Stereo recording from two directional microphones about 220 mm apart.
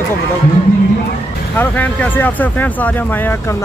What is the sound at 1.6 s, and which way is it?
Speech, 10° left (ahead or behind).